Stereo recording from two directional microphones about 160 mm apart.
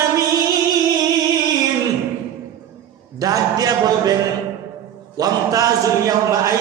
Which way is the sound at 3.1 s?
20° right (ahead or behind).